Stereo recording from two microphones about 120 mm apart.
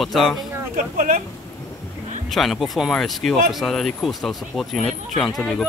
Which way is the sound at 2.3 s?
Centre (ahead or behind).